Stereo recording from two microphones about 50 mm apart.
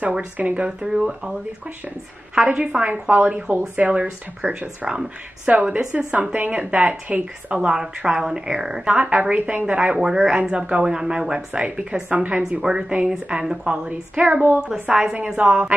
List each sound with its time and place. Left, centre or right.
0.4 s speech: right
0.7 s speech: centre
2.4 s speech: centre
3.9 s speech: centre
5.5 s speech: right
7.5 s a woman's voice: centre
9.0 s a woman's voice: right
14.3 s speech: right
14.9 s speech: centre